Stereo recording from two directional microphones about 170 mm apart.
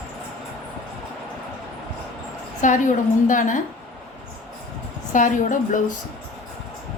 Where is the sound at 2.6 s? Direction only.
50° left (ahead or behind).